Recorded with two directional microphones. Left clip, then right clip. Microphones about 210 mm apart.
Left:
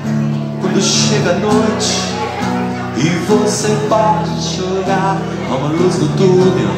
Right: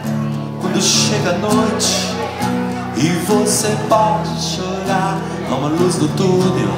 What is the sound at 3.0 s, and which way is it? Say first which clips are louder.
Music: left 2 dB; 50° right (ahead or behind).